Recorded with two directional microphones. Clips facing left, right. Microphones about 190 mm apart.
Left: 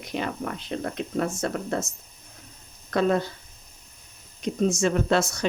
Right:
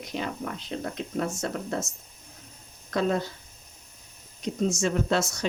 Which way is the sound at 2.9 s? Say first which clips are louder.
Left 3 dB; 60° left (ahead or behind).